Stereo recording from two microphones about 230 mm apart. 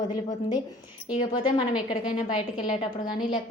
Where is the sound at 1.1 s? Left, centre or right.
Left.